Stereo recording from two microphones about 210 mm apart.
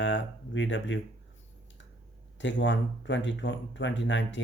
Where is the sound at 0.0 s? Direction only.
60° left (ahead or behind).